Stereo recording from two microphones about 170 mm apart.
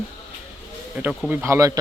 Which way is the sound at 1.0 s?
10° right (ahead or behind).